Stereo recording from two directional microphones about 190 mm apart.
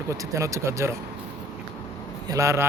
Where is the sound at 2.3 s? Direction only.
15° right (ahead or behind).